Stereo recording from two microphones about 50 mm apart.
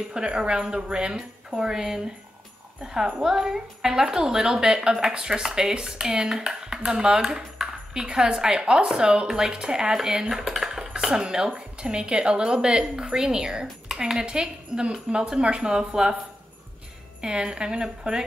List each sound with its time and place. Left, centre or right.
0.1 s speech: centre
3.1 s speech: centre
17.2 s speech: centre